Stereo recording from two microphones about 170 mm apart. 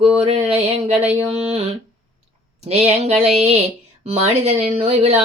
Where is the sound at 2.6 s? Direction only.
40° right (ahead or behind).